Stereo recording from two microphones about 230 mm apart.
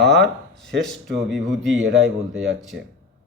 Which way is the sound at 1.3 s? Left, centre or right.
Centre.